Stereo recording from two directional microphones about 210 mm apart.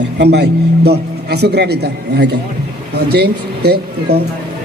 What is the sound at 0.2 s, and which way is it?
A man's voice, 50° right (ahead or behind).